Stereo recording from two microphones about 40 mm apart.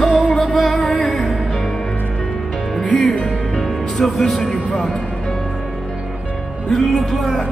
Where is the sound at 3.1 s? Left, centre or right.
Centre.